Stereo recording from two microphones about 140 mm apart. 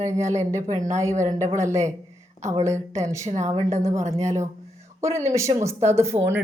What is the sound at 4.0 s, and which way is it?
Speech, 55° right (ahead or behind).